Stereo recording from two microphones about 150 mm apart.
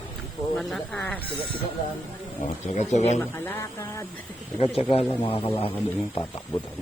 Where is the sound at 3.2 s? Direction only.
15° left (ahead or behind).